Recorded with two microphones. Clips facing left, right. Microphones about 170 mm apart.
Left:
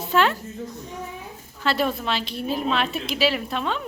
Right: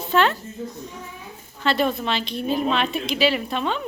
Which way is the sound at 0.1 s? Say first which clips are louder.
Right 1 dB; 5° left (ahead or behind).